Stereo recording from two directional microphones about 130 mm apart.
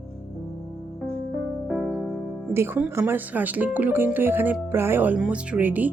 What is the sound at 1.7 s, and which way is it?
Music, 5° right (ahead or behind).